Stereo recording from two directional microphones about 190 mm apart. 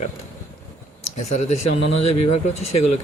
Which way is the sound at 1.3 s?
35° left (ahead or behind).